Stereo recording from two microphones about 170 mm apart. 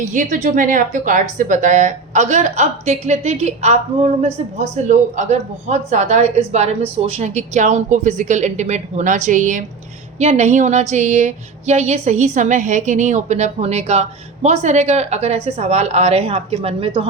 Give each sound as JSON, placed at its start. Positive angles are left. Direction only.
{"t": 0.0, "sound": "a woman's voice", "side_deg": -45}